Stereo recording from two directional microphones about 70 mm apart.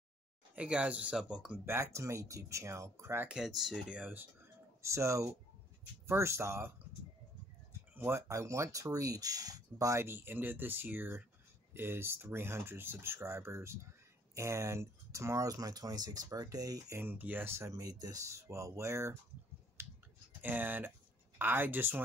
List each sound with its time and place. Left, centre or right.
0.6 s speech: centre
1.7 s speech: right
3.3 s speech: centre
3.9 s speech: right
4.8 s speech: right
7.9 s a sound: right
8.2 s speech: right
10.0 s speech: right
17.0 s speech: right
19.8 s typing: right
20.4 s speech: right